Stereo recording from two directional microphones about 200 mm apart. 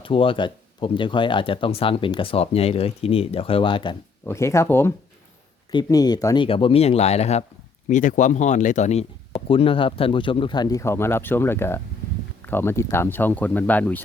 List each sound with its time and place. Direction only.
0.0 s speech: 25° left (ahead or behind)
4.3 s speech: 15° left (ahead or behind)